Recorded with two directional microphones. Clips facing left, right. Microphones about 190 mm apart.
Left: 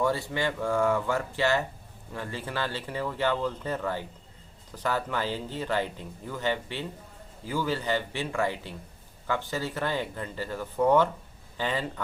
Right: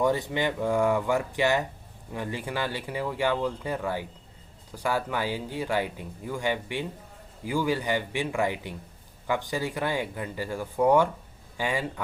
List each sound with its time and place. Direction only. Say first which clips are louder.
0.0 s speech: right 2 dB; 15° right (ahead or behind)